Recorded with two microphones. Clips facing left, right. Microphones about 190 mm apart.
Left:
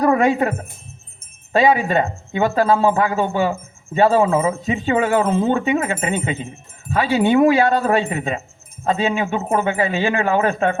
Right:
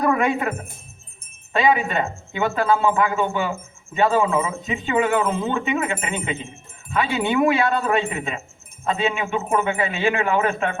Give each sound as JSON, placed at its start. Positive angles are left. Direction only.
{"t": 0.0, "sound": "music", "side_deg": 35}
{"t": 1.5, "sound": "speech", "side_deg": 35}